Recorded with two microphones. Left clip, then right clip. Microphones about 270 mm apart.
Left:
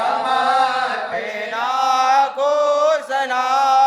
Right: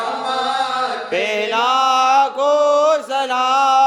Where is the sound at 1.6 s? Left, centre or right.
Right.